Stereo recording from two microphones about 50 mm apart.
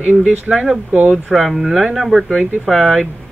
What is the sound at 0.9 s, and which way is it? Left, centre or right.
Speech, right.